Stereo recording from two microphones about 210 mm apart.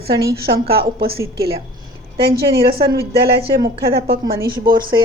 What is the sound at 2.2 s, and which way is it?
A woman's voice, 45° right (ahead or behind).